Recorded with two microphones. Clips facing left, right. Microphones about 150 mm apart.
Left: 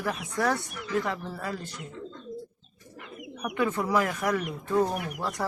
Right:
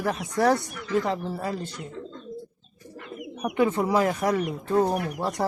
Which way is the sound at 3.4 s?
25° right (ahead or behind).